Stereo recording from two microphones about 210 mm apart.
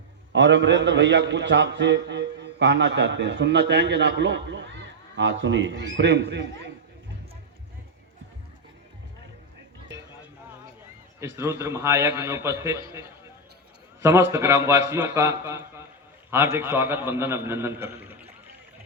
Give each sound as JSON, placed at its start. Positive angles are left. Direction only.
{"t": 0.3, "sound": "a man's voice", "side_deg": -60}
{"t": 11.3, "sound": "a man's voice", "side_deg": -10}
{"t": 14.0, "sound": "a man's voice", "side_deg": -15}